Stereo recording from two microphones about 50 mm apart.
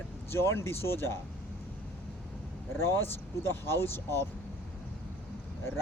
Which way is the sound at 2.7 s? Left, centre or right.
Left.